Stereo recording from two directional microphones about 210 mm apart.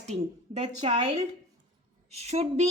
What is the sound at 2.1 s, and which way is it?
Speech, 30° right (ahead or behind).